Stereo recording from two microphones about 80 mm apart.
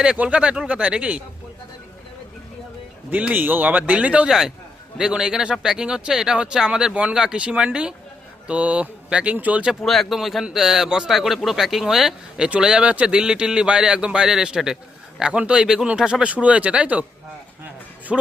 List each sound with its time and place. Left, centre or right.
0.0 s speech: centre
3.1 s speech: centre
9.8 s speech: centre
18.1 s speech: centre